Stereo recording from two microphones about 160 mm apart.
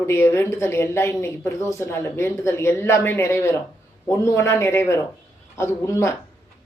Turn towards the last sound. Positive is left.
turn(degrees=15)  # may be behind; listen again after turning